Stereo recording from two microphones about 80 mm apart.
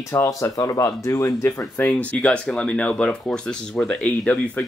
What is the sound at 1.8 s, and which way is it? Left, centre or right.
Speech, centre.